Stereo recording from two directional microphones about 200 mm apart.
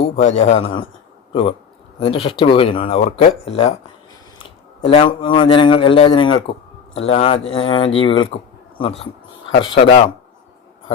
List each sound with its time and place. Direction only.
0.0 s a man's voice: 30° left (ahead or behind)
4.8 s a man's voice: 25° left (ahead or behind)